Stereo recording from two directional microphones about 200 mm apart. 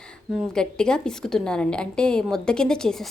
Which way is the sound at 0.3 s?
5° left (ahead or behind).